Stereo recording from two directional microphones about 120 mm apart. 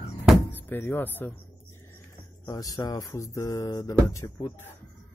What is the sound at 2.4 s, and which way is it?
Speech, 30° left (ahead or behind).